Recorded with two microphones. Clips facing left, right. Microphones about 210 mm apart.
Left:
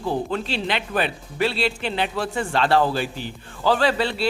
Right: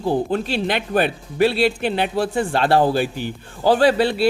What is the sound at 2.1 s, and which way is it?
Speech, 35° right (ahead or behind).